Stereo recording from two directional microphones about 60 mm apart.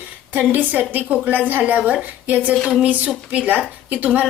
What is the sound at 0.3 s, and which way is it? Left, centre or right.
A woman's voice, right.